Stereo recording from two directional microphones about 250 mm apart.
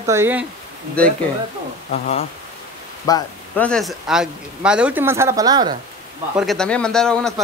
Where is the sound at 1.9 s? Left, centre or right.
Left.